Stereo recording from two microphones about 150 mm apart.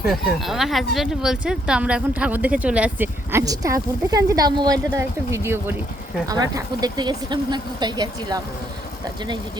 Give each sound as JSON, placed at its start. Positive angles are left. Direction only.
{"t": 0.1, "sound": "speech", "side_deg": 0}
{"t": 3.4, "sound": "speech", "side_deg": -25}